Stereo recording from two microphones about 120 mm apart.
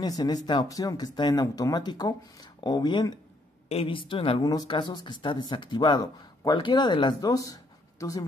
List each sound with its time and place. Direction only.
0.0 s speech: 30° left (ahead or behind)
3.6 s a woman's voice: 50° left (ahead or behind)
4.4 s speech: 30° left (ahead or behind)
4.6 s speech: 40° left (ahead or behind)